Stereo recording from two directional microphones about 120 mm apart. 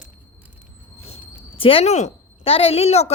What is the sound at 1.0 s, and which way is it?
A woman's voice, 55° left (ahead or behind).